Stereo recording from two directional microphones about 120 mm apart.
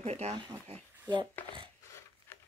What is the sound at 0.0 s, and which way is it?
Speech, 65° right (ahead or behind).